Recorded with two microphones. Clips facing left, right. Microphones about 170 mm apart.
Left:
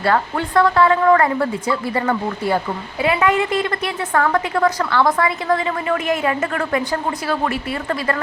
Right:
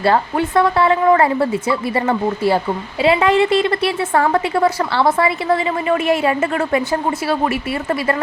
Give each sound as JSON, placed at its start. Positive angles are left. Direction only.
{"t": 0.0, "sound": "a woman's voice", "side_deg": -25}